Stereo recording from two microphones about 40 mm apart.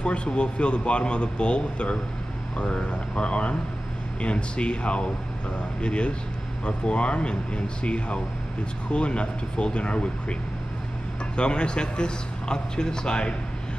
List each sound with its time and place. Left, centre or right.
0.0 s a man's voice: left
11.3 s a man's voice: left